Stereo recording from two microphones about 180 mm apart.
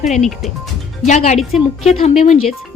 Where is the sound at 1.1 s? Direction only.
40° left (ahead or behind).